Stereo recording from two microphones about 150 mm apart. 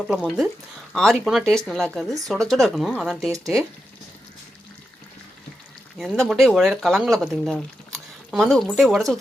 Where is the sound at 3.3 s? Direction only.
20° right (ahead or behind).